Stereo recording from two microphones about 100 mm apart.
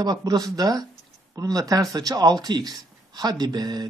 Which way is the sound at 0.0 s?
45° right (ahead or behind).